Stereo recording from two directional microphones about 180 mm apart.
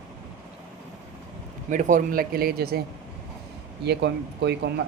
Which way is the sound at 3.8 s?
70° right (ahead or behind).